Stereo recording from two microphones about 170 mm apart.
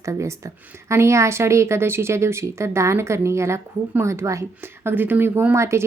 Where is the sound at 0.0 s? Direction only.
15° right (ahead or behind).